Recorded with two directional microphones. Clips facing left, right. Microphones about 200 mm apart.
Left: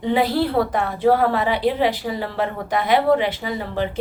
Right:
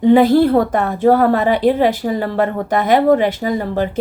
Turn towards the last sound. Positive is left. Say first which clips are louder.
# right 6 dB
turn(degrees=-45)  # may be behind; listen again after turning